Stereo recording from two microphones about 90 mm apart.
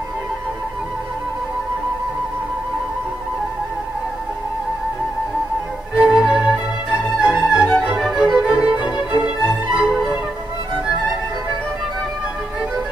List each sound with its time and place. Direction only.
5.9 s music: 5° right (ahead or behind)
7.9 s music: 5° right (ahead or behind)
8.8 s music: 55° left (ahead or behind)
9.8 s music: 5° right (ahead or behind)